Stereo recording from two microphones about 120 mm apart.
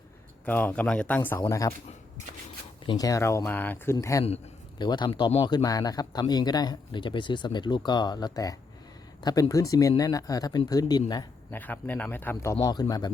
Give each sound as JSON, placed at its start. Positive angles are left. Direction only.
{"t": 0.4, "sound": "a man's voice", "side_deg": 15}
{"t": 1.4, "sound": "speech", "side_deg": 30}
{"t": 3.0, "sound": "speech", "side_deg": 25}
{"t": 4.1, "sound": "speech", "side_deg": 30}
{"t": 4.8, "sound": "speech", "side_deg": 40}
{"t": 11.5, "sound": "a man's voice", "side_deg": 15}